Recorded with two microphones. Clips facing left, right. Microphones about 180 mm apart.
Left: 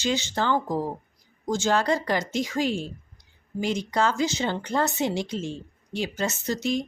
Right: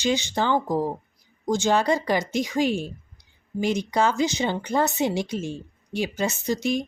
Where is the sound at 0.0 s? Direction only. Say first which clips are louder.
Right 2 dB; 15° right (ahead or behind).